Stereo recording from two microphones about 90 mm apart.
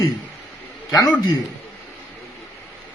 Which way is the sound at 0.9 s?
40° left (ahead or behind).